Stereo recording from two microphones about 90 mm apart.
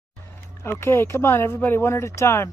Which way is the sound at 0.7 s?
30° left (ahead or behind).